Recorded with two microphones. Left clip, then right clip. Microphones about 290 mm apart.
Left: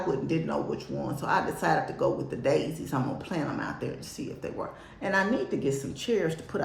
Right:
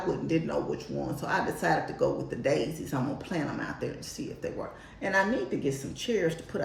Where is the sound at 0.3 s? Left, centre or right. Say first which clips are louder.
Even; centre.